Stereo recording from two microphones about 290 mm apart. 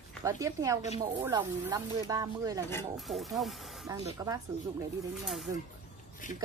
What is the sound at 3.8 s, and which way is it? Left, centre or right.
Speech, centre.